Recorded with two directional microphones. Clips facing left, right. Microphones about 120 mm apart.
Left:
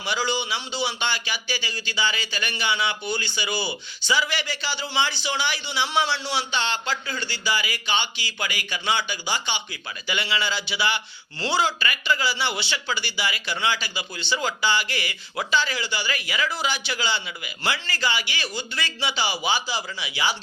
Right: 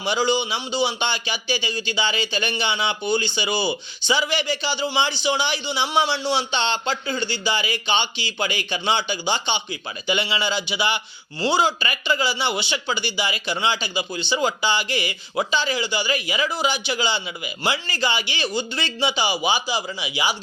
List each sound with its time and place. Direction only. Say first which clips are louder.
0.0 s a man's voice: right 5 dB; 20° right (ahead or behind)